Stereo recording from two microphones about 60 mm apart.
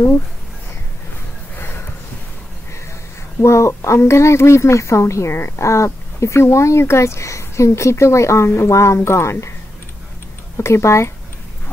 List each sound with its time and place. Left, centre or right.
3.3 s a woman's voice: left
10.6 s a woman's voice: left